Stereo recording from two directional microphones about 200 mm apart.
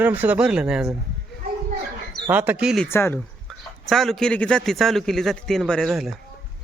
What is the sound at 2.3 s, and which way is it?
Speech, 10° right (ahead or behind).